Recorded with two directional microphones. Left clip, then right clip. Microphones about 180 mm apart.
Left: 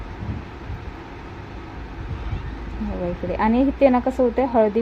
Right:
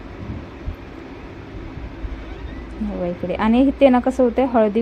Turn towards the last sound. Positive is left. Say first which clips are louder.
# right 2 dB
turn(degrees=-20)  # may be behind; listen again after turning